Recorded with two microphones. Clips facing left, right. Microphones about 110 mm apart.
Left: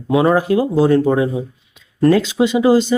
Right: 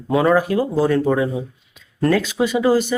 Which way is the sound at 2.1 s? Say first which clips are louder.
Left 4 dB; 25° left (ahead or behind).